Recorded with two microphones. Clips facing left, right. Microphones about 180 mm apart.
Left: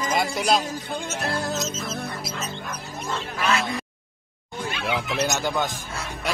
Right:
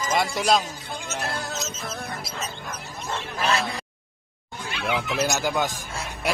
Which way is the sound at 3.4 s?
30° right (ahead or behind).